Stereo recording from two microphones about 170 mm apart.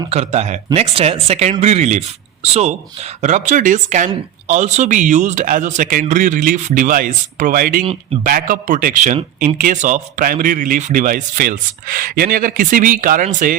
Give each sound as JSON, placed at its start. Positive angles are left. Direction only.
{"t": 0.1, "sound": "a woman's voice", "side_deg": -40}